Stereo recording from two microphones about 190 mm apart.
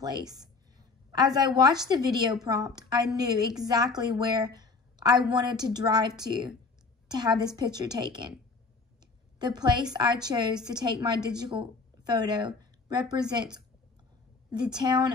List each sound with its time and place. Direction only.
0.0 s a woman's voice: 20° right (ahead or behind)
9.4 s a woman's voice: 20° right (ahead or behind)